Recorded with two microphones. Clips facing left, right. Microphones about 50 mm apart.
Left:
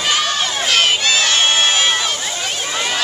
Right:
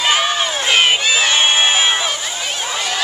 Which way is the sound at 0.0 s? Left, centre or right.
Centre.